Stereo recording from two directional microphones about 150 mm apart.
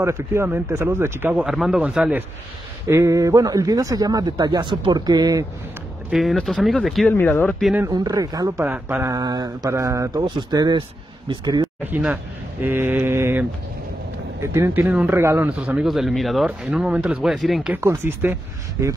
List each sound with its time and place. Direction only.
0.0 s a man's voice: 15° right (ahead or behind)
2.9 s a man's voice: 20° right (ahead or behind)
6.0 s speech: centre (ahead or behind)
7.1 s speech: 10° left (ahead or behind)
7.9 s a man's voice: 25° right (ahead or behind)
11.8 s a man's voice: 10° right (ahead or behind)
17.7 s a man's voice: 15° right (ahead or behind)